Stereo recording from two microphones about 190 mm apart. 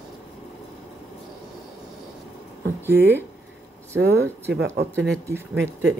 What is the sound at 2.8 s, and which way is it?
Speech, 10° right (ahead or behind).